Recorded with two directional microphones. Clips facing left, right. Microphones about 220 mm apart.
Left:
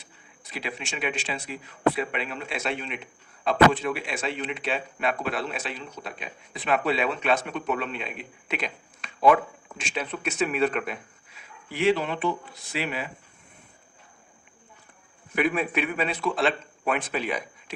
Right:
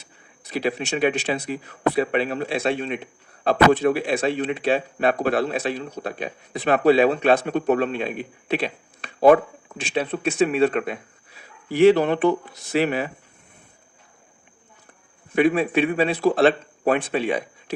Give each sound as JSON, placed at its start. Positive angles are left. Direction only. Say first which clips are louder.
{"t": 0.5, "sound": "speech", "louder": "right 10 dB", "side_deg": -40}
{"t": 11.7, "sound": "speech", "louder": "right 9 dB", "side_deg": -40}
{"t": 12.0, "sound": "speech", "louder": "right 8 dB", "side_deg": -55}
{"t": 12.8, "sound": "speech", "louder": "right 8 dB", "side_deg": -45}
{"t": 15.4, "sound": "speech", "louder": "right 7 dB", "side_deg": -30}